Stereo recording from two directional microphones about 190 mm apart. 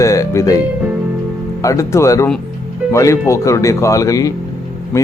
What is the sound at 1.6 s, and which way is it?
Speech, 15° left (ahead or behind).